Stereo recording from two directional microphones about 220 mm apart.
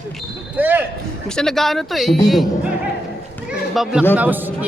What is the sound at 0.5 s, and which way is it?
Speech, 10° right (ahead or behind).